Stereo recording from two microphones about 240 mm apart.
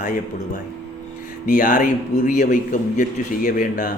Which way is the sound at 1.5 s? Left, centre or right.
Left.